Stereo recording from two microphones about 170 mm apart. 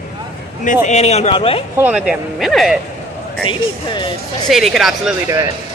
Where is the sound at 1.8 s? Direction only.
5° right (ahead or behind).